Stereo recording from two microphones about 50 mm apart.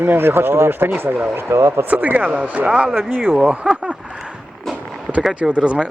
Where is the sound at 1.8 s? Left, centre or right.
Right.